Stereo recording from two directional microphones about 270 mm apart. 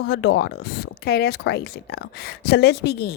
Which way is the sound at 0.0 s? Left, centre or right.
Left.